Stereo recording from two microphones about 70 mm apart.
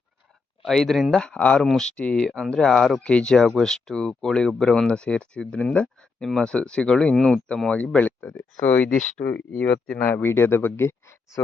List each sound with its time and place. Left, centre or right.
0.6 s speech: centre
1.2 s speech: centre
3.0 s speech: centre
7.7 s speech: centre